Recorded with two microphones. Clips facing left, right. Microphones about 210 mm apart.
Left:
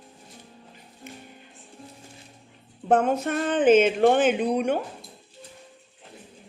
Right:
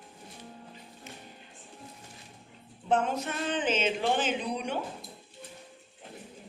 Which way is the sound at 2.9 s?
55° left (ahead or behind).